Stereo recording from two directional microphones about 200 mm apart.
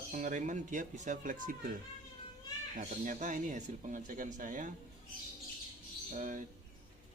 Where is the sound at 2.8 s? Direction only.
40° right (ahead or behind).